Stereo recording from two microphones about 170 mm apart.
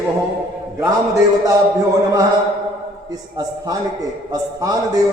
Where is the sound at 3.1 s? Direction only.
20° right (ahead or behind).